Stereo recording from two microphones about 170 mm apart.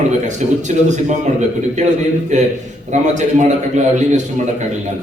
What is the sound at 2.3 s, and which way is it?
A man's voice, 45° right (ahead or behind).